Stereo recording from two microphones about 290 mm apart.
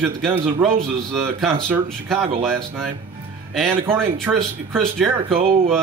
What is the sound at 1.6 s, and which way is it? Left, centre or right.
Speech, centre.